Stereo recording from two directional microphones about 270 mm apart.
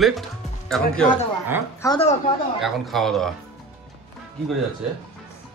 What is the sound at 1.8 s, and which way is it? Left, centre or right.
Speech, centre.